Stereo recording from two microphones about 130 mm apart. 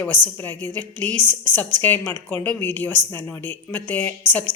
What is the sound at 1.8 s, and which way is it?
A woman's voice, 15° left (ahead or behind).